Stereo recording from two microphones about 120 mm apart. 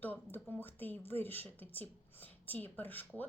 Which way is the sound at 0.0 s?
15° left (ahead or behind).